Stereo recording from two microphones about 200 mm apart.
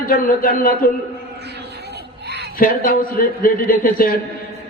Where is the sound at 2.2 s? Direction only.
55° right (ahead or behind).